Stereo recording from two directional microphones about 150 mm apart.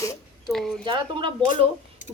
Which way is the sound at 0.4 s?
Centre (ahead or behind).